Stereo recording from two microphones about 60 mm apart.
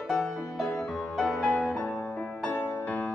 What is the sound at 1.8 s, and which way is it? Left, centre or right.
Music, centre.